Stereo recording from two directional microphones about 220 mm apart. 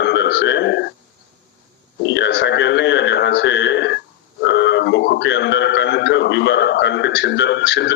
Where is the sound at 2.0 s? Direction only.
55° left (ahead or behind).